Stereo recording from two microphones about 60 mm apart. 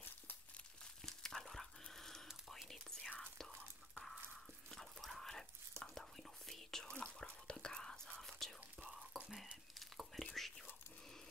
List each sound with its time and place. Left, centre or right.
1.0 s whispering: centre
4.6 s whispering: centre